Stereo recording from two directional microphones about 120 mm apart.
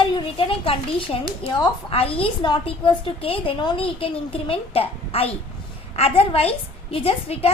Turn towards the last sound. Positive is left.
turn(degrees=55)  # may be behind; listen again after turning